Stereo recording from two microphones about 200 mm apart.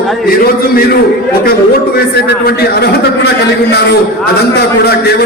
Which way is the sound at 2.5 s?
55° left (ahead or behind).